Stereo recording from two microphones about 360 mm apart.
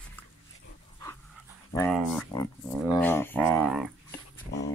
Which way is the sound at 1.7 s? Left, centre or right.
Centre.